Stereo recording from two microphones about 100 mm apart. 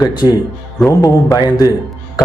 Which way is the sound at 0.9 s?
30° left (ahead or behind).